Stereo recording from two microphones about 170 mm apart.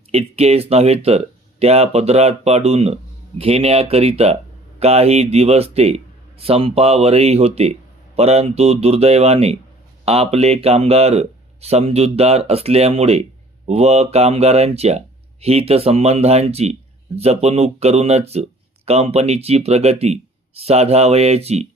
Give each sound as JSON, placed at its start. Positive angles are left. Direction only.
{"t": 0.1, "sound": "speech", "side_deg": -35}